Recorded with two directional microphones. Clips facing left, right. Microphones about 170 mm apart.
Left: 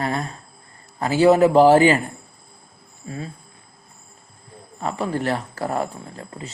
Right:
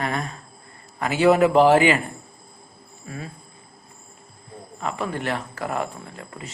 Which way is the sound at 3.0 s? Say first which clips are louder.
Left 3 dB; 30° left (ahead or behind).